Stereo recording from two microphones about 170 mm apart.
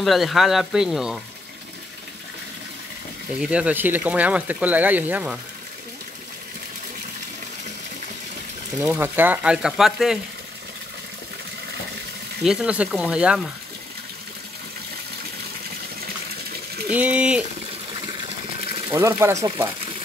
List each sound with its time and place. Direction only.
0.0 s speech: centre (ahead or behind)
3.3 s speech: 5° right (ahead or behind)
8.8 s speech: 10° right (ahead or behind)
12.4 s speech: 5° right (ahead or behind)
16.9 s speech: 10° right (ahead or behind)
18.6 s sewing machine: 35° right (ahead or behind)
18.9 s speech: 15° right (ahead or behind)